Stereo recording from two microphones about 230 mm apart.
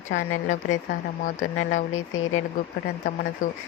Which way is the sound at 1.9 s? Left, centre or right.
Left.